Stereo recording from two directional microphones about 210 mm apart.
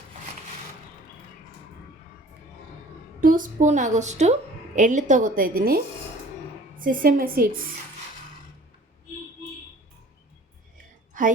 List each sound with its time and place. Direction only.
3.2 s a woman's voice: 40° right (ahead or behind)